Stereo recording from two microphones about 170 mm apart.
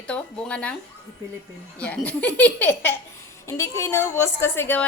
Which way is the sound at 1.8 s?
5° left (ahead or behind).